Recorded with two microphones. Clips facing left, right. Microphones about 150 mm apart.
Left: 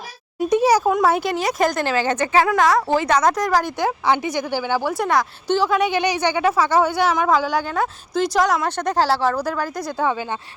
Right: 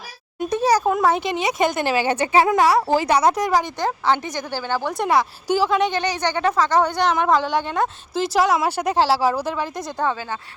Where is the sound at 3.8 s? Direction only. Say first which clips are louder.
Left 1 dB; 10° left (ahead or behind).